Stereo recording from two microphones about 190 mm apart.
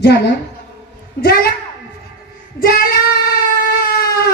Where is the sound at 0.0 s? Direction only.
55° left (ahead or behind).